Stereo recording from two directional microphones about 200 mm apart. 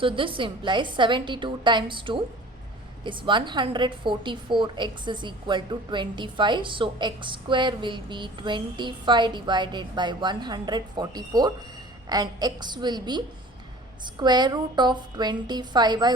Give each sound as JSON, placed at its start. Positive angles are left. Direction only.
{"t": 0.0, "sound": "a woman's voice", "side_deg": -25}